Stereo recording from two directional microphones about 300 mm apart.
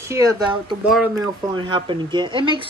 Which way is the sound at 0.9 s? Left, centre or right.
Centre.